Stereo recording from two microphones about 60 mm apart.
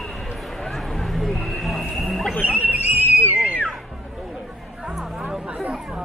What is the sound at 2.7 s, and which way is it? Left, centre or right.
Whistle, right.